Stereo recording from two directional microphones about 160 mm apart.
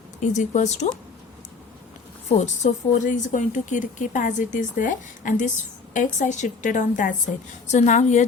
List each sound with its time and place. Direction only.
0.2 s a woman's voice: 50° left (ahead or behind)
2.3 s a woman's voice: 45° left (ahead or behind)